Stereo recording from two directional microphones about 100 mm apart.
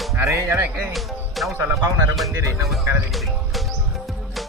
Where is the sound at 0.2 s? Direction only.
30° right (ahead or behind).